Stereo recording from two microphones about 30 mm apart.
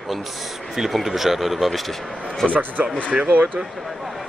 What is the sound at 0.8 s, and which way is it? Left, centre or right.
Speech, centre.